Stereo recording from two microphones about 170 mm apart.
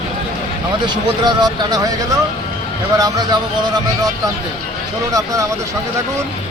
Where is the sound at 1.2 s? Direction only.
25° right (ahead or behind).